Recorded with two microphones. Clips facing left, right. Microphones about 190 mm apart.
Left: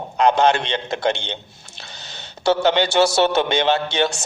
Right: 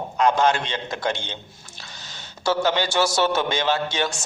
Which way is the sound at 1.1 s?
70° left (ahead or behind).